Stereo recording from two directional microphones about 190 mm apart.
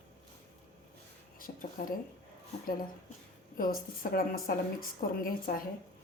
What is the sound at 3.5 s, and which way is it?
A woman's voice, 50° left (ahead or behind).